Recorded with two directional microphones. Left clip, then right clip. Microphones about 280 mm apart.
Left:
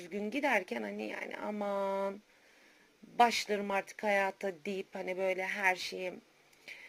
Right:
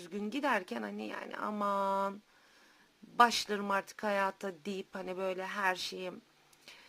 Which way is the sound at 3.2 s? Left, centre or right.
Right.